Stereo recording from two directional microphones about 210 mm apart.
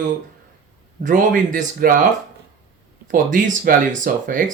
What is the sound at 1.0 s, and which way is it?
Speech, 40° right (ahead or behind).